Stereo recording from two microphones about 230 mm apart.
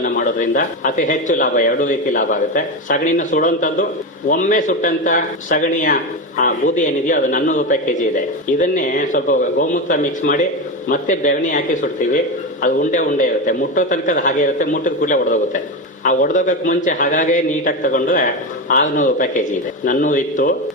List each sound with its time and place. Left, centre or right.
0.0 s speech: left